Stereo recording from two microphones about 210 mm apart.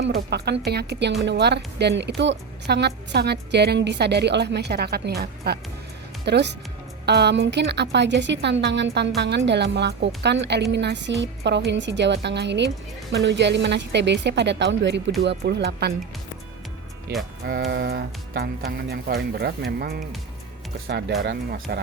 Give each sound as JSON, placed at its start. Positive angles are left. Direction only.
{"t": 0.3, "sound": "a woman's voice", "side_deg": -50}
{"t": 17.4, "sound": "speech", "side_deg": -50}